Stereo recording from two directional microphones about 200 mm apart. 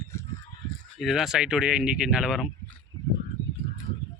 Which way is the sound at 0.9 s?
Centre (ahead or behind).